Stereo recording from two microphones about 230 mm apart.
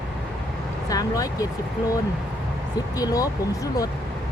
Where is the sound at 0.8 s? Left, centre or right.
Centre.